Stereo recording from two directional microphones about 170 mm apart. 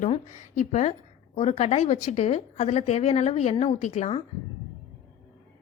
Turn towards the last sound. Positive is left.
turn(degrees=40)  # may be behind; listen again after turning